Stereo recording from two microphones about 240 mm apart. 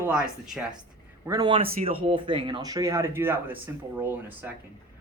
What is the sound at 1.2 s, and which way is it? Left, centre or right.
Speech, centre.